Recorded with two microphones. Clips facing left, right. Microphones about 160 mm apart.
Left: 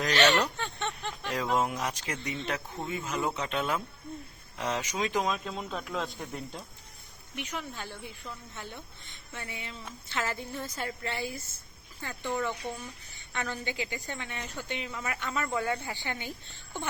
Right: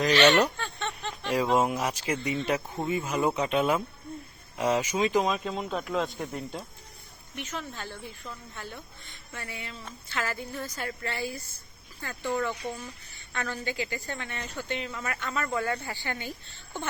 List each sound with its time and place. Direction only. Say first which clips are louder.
0.0 s speech: right 4 dB; 10° right (ahead or behind)
0.6 s a sound: even; 15° left (ahead or behind)
1.3 s speech: right 5 dB; 10° right (ahead or behind)
7.3 s a woman's voice: right 1 dB; 15° left (ahead or behind)